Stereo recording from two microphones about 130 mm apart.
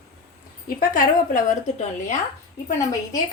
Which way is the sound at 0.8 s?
90° left.